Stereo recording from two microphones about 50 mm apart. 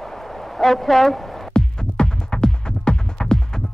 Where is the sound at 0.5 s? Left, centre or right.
Centre.